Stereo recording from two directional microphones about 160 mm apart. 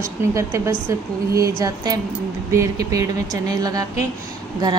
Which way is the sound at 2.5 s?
20° right (ahead or behind).